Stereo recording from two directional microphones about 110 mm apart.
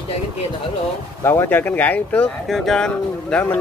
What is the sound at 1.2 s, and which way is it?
Speech, 20° left (ahead or behind).